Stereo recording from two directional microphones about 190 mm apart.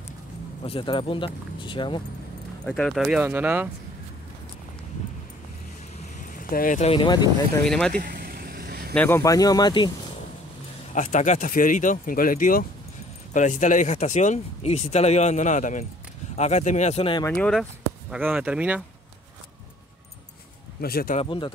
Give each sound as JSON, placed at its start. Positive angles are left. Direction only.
{"t": 0.7, "sound": "speech", "side_deg": 25}
{"t": 2.6, "sound": "speech", "side_deg": 5}
{"t": 6.3, "sound": "speech", "side_deg": 45}
{"t": 6.9, "sound": "speech", "side_deg": 25}
{"t": 7.6, "sound": "speech", "side_deg": 5}
{"t": 7.9, "sound": "vehicle", "side_deg": -50}
{"t": 8.9, "sound": "speech", "side_deg": 10}
{"t": 11.0, "sound": "speech", "side_deg": 40}
{"t": 17.2, "sound": "speech", "side_deg": 5}
{"t": 18.1, "sound": "speech", "side_deg": -5}
{"t": 20.8, "sound": "speech", "side_deg": 50}
{"t": 21.2, "sound": "speech", "side_deg": 25}